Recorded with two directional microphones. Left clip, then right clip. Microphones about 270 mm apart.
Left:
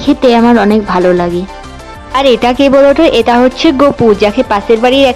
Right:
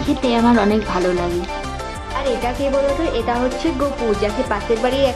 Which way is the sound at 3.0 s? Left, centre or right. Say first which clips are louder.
Left 12 dB; left.